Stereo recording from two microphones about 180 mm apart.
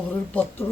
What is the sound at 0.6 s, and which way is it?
Speech, 20° left (ahead or behind).